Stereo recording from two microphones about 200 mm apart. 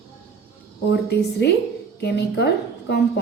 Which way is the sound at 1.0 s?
55° left (ahead or behind).